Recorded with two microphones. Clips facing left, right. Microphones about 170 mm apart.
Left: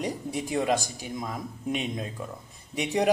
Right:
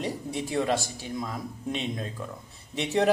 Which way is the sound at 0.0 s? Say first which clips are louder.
Left 1 dB; 15° left (ahead or behind).